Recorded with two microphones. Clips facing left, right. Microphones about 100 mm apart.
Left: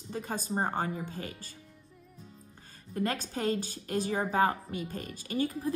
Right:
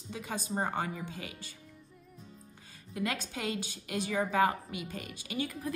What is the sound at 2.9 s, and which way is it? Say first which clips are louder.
A woman's voice: left 3 dB; 40° left (ahead or behind).